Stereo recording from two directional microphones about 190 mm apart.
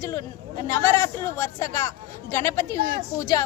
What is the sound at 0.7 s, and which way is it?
Speech, 15° left (ahead or behind).